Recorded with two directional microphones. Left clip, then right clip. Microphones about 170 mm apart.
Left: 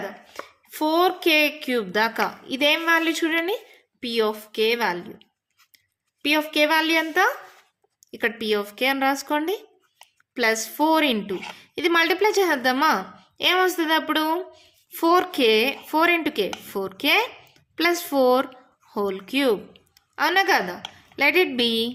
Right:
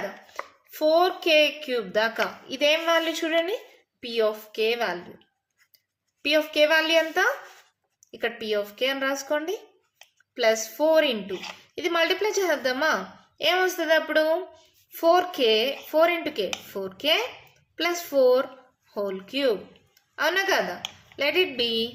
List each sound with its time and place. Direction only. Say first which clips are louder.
0.3 s a woman's voice: left 4 dB; 45° left (ahead or behind)
6.2 s a woman's voice: even; 45° left (ahead or behind)